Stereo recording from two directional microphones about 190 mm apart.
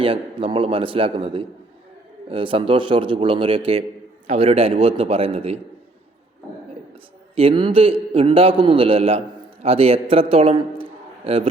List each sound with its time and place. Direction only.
0.0 s a man's voice: 30° right (ahead or behind)
6.9 s a man's voice: 30° right (ahead or behind)